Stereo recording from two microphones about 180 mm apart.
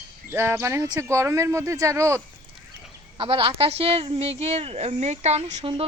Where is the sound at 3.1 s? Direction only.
30° right (ahead or behind).